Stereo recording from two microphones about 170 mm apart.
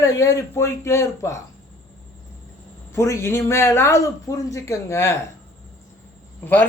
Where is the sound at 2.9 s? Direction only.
15° left (ahead or behind).